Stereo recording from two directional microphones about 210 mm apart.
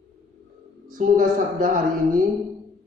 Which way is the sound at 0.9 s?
40° right (ahead or behind).